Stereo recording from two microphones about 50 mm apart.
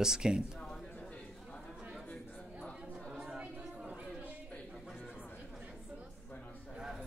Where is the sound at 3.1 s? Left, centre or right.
Centre.